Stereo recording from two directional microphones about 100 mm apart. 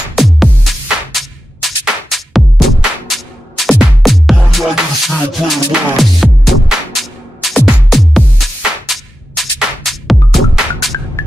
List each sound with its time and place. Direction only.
0.1 s music: centre (ahead or behind)
11.2 s music: 25° left (ahead or behind)